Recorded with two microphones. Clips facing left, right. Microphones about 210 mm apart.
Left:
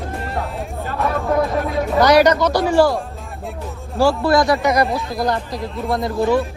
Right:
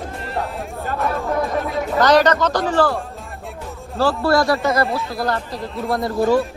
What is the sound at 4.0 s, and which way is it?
Speech, 15° left (ahead or behind).